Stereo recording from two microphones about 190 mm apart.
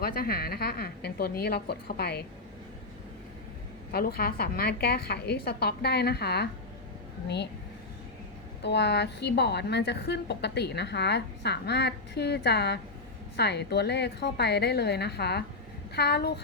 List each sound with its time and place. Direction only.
0.0 s a woman's voice: 50° left (ahead or behind)
3.9 s a woman's voice: 50° left (ahead or behind)
8.6 s a woman's voice: 65° left (ahead or behind)